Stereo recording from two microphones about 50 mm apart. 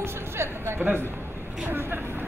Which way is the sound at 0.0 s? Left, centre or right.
Right.